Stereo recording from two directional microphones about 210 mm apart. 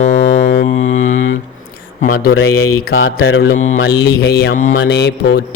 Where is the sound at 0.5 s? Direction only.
35° left (ahead or behind).